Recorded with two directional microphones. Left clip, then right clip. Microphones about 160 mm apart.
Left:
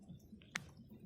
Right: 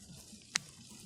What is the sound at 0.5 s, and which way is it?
Music, 10° left (ahead or behind).